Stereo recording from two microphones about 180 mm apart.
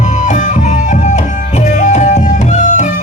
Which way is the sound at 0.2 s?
45° left (ahead or behind).